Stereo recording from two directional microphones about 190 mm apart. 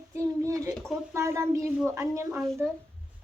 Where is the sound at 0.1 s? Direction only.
15° right (ahead or behind).